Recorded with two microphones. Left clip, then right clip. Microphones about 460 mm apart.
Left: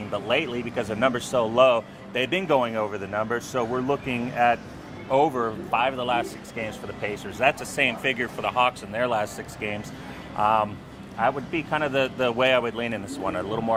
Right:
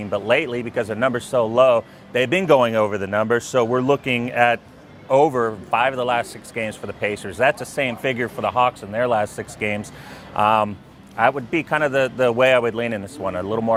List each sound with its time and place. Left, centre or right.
0.1 s speech: right